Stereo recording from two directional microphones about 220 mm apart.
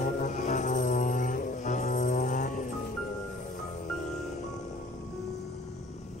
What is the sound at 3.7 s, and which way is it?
Music, 35° left (ahead or behind).